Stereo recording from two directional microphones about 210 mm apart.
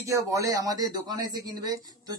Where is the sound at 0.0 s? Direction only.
15° right (ahead or behind).